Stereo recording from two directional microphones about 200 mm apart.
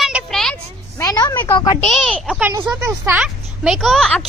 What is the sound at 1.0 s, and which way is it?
Speech, 20° left (ahead or behind).